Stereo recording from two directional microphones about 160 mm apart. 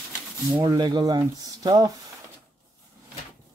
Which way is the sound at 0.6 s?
25° right (ahead or behind).